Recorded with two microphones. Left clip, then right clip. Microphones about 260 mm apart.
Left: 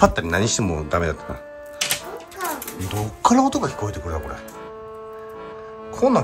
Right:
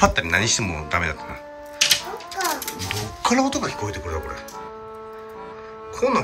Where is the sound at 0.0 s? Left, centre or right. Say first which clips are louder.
Left 1 dB; centre.